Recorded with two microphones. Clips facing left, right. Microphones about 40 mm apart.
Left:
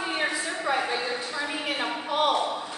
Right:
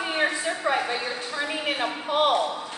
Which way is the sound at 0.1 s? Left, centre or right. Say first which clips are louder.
Right 5 dB; right.